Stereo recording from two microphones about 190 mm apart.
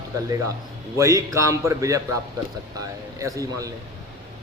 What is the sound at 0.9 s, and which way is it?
A man's voice, 15° right (ahead or behind).